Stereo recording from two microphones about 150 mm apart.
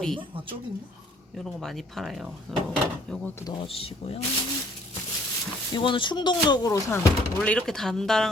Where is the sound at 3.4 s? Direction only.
35° left (ahead or behind).